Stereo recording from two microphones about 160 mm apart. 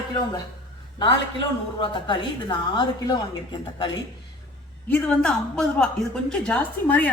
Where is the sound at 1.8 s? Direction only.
30° left (ahead or behind).